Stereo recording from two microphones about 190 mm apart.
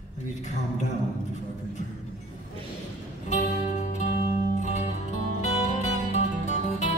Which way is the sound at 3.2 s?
40° left (ahead or behind).